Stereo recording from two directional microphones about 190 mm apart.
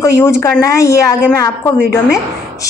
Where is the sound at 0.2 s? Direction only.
15° left (ahead or behind).